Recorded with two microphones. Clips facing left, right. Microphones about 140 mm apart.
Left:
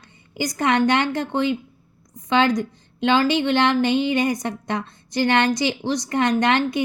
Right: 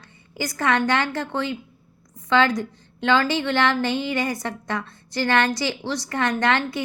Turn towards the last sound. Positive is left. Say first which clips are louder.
# left 3 dB
turn(degrees=20)  # may be behind; listen again after turning